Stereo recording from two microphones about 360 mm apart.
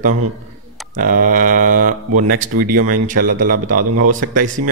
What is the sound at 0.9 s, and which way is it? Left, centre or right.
Speech, right.